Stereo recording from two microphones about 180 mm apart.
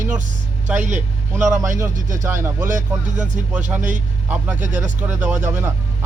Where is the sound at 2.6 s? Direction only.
45° right (ahead or behind).